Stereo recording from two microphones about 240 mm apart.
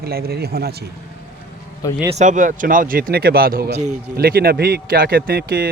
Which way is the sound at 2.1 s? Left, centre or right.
Right.